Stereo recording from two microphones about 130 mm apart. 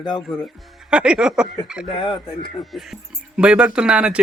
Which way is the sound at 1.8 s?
40° left (ahead or behind).